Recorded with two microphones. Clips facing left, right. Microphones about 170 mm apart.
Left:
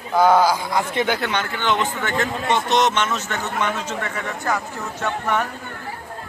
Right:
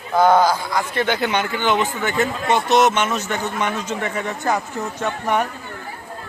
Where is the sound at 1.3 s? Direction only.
10° right (ahead or behind).